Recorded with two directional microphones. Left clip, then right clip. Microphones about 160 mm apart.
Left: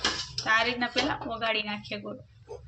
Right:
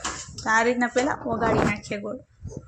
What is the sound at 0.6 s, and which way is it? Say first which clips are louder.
Speech: right 5 dB; 35° right (ahead or behind).